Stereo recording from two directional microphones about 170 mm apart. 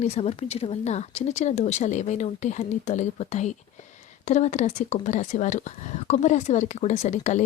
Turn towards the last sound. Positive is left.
turn(degrees=45)  # may be behind; listen again after turning